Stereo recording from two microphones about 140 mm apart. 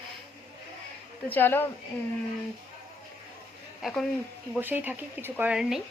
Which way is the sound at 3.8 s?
Centre (ahead or behind).